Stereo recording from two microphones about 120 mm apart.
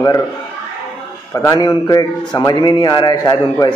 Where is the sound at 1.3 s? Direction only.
30° left (ahead or behind).